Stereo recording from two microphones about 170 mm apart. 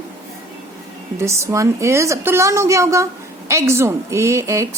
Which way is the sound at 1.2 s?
15° right (ahead or behind).